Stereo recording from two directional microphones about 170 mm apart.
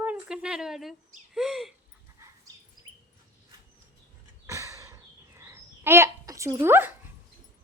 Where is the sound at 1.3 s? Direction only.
Centre (ahead or behind).